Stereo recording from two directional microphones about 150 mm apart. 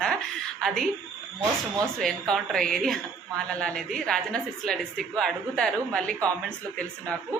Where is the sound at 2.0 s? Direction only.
5° left (ahead or behind).